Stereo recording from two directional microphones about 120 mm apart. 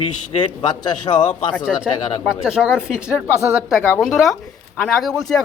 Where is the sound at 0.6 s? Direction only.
35° left (ahead or behind).